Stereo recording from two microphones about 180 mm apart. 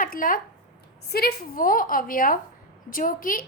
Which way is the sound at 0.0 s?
50° left (ahead or behind).